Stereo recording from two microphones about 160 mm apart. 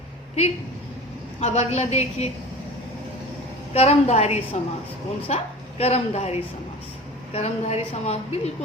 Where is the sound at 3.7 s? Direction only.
40° left (ahead or behind).